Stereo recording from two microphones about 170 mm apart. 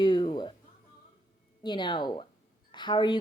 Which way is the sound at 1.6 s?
25° left (ahead or behind).